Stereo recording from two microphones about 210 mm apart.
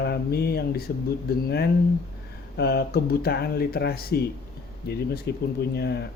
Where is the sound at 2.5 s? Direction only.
50° left (ahead or behind).